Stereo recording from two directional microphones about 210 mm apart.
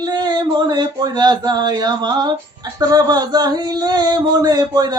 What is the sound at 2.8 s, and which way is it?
Speech, 20° right (ahead or behind).